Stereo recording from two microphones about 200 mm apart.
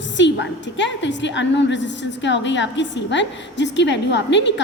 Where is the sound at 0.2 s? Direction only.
65° left (ahead or behind).